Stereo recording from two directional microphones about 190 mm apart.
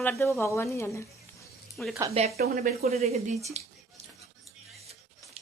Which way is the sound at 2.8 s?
35° right (ahead or behind).